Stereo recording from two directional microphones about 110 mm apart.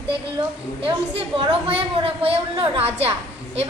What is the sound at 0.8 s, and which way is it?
A woman's voice, 55° right (ahead or behind).